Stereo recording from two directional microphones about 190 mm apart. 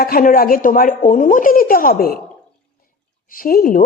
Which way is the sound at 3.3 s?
50° left (ahead or behind).